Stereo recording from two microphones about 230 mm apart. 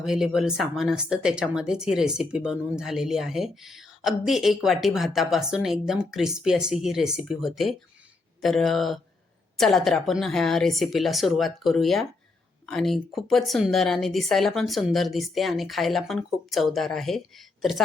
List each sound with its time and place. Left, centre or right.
0.0 s speech: centre